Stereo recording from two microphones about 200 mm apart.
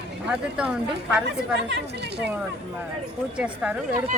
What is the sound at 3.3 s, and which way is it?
Speech, 5° right (ahead or behind).